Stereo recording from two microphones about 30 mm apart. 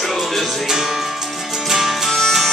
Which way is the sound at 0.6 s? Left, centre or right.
Centre.